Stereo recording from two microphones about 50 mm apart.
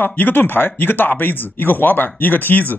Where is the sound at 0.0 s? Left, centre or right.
Left.